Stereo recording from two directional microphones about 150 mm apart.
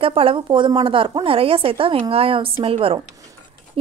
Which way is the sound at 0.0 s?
35° right (ahead or behind).